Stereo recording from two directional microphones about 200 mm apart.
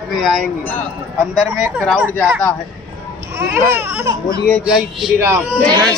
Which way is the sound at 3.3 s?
10° right (ahead or behind).